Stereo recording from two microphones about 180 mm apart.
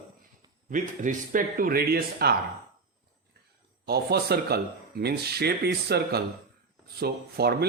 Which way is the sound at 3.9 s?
60° right (ahead or behind).